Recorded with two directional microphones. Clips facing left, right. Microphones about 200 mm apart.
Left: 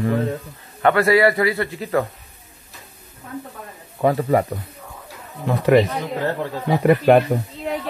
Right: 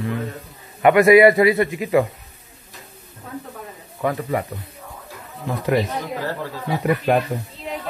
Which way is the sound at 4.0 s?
30° left (ahead or behind).